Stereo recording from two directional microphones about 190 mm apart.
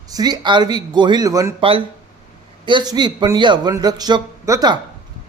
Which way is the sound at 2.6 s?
25° right (ahead or behind).